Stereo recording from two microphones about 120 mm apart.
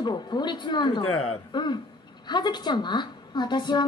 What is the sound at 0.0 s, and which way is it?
A woman's voice, 35° left (ahead or behind).